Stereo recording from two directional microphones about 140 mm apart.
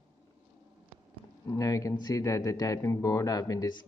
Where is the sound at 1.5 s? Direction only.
25° left (ahead or behind).